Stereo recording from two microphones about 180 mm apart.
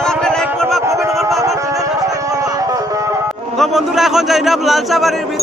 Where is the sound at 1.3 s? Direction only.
15° right (ahead or behind).